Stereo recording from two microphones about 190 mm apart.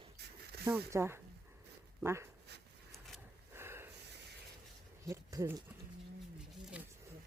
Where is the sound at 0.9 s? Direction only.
15° right (ahead or behind).